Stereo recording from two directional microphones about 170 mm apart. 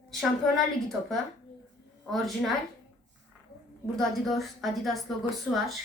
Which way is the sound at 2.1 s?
Centre (ahead or behind).